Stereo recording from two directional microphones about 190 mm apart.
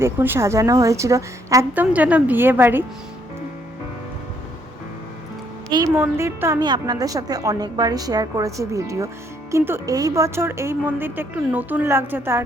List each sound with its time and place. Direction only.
0.0 s speech: 10° right (ahead or behind)
5.7 s a woman's voice: 15° right (ahead or behind)